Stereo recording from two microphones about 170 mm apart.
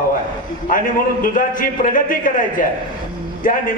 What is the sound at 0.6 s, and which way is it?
A man's voice, 55° left (ahead or behind).